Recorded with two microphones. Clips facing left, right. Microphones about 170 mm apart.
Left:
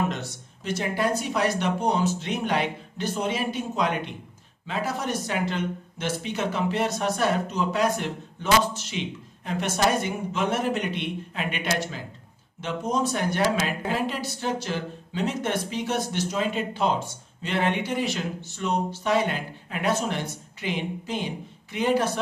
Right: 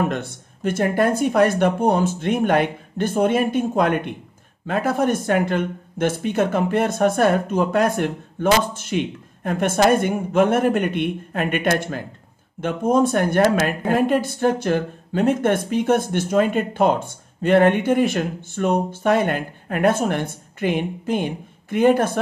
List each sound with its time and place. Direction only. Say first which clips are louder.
0.0 s speech: right 5 dB; 55° right (ahead or behind)